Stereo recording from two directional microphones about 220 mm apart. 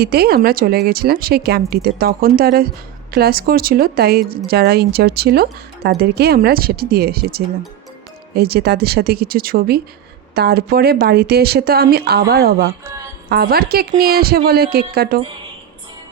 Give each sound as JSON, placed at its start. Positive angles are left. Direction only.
{"t": 0.0, "sound": "speech", "side_deg": -45}